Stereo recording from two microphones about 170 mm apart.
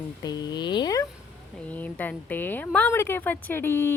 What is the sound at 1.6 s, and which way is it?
Speech, 10° left (ahead or behind).